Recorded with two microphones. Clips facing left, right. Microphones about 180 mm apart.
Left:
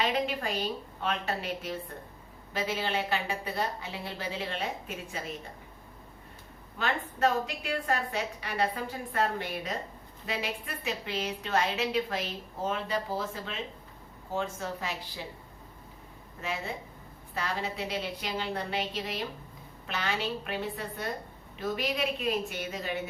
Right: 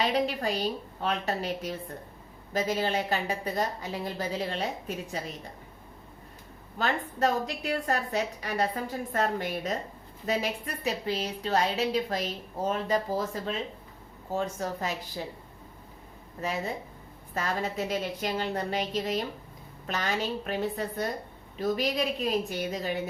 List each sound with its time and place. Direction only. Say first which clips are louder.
0.1 s a woman's voice: right 3 dB; 40° right (ahead or behind)
6.7 s a woman's voice: right 3 dB; 40° right (ahead or behind)
16.4 s a woman's voice: right 4 dB; 40° right (ahead or behind)